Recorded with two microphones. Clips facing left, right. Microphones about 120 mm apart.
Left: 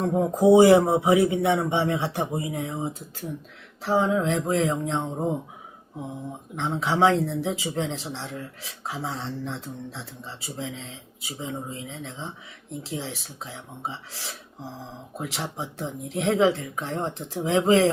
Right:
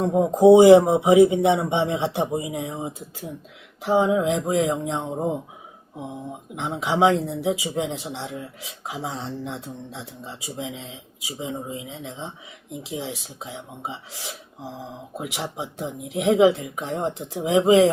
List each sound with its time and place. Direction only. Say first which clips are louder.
0.0 s speech: right 4 dB; 20° right (ahead or behind)
6.6 s speech: right 1 dB; 15° right (ahead or behind)